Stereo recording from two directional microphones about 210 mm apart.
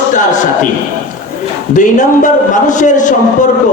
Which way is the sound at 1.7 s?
35° left (ahead or behind).